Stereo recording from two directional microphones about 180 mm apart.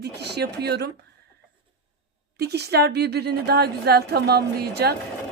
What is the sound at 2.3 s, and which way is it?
Speech, 65° right (ahead or behind).